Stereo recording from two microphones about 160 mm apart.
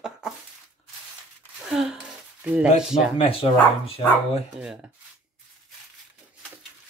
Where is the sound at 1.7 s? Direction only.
5° right (ahead or behind).